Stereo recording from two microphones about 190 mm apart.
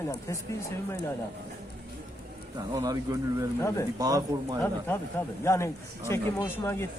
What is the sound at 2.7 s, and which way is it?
Speech, 20° right (ahead or behind).